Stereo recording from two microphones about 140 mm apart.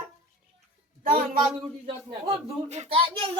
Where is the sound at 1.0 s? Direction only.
80° right.